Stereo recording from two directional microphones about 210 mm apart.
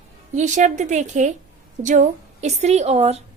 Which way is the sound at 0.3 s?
35° right (ahead or behind).